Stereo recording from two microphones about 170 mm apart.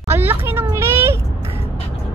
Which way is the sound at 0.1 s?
15° right (ahead or behind).